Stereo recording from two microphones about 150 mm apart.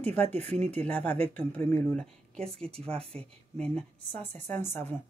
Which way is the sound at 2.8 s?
40° right (ahead or behind).